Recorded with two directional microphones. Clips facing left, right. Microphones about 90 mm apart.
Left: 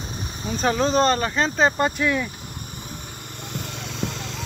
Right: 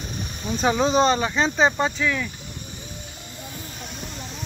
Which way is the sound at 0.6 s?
5° right (ahead or behind).